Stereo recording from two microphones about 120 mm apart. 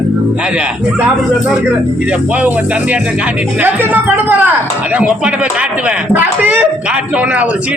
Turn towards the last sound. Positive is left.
turn(degrees=-10)  # may be behind; listen again after turning